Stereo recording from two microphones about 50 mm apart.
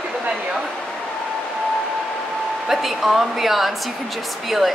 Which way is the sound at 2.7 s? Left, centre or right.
Centre.